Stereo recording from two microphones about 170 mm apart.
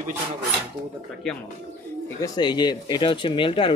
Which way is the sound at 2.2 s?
25° left (ahead or behind).